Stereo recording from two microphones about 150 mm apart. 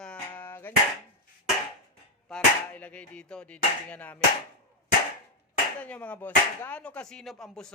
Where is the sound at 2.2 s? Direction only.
10° left (ahead or behind).